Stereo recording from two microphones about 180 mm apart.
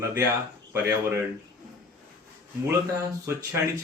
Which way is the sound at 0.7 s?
15° right (ahead or behind).